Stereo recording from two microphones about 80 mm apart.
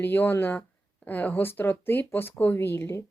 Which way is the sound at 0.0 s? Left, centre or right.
Left.